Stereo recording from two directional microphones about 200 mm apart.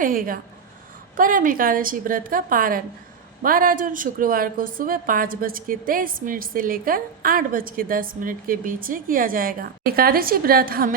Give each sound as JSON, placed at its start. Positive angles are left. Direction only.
{"t": 0.0, "sound": "a woman's voice", "side_deg": -45}